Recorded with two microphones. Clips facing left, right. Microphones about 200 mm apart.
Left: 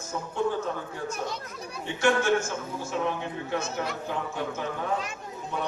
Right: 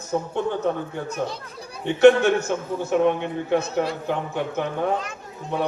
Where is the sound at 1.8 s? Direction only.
65° right (ahead or behind).